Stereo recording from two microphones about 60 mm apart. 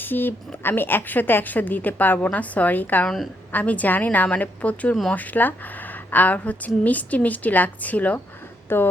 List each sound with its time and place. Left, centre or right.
0.0 s a woman's voice: left
8.7 s a woman's voice: left